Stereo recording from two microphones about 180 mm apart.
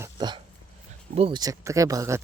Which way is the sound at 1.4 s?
20° right (ahead or behind).